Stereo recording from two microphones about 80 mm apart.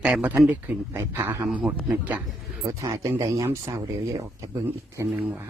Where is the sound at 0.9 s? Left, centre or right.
Right.